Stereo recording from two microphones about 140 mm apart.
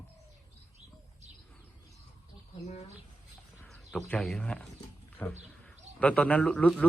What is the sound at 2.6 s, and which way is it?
Speech, 50° left (ahead or behind).